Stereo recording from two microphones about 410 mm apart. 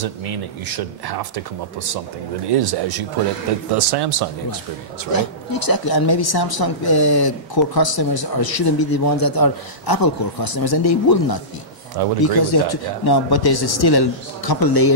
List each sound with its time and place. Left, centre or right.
0.0 s speech: right
5.1 s speech: left
12.0 s speech: right
12.4 s speech: left
13.0 s speech: left